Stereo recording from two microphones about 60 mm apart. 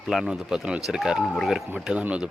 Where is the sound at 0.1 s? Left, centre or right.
Centre.